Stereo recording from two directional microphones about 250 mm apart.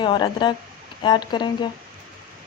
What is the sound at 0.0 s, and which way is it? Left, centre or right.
Speech, centre.